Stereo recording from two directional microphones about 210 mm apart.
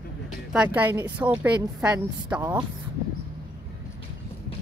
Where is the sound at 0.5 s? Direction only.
5° right (ahead or behind).